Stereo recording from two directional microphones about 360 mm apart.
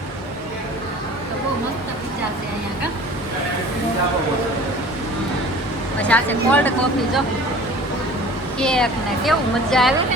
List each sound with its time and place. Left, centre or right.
6.0 s speech: centre
8.5 s speech: centre